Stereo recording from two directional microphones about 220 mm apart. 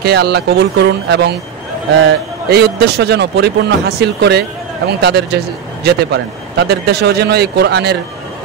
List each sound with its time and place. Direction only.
0.0 s speech: 45° right (ahead or behind)
2.5 s speech: 50° right (ahead or behind)